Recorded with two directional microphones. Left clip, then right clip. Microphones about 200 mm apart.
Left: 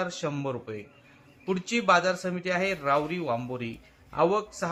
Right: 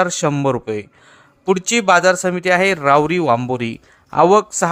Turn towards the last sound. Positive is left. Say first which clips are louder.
# right 13 dB
turn(degrees=-50)  # may be behind; listen again after turning